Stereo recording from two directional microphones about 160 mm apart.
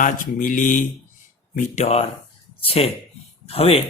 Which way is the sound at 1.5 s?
45° left (ahead or behind).